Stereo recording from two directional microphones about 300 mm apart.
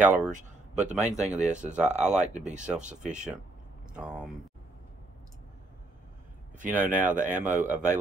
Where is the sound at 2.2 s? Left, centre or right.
Right.